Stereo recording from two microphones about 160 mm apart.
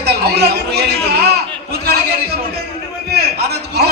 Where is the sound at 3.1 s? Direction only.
90° right.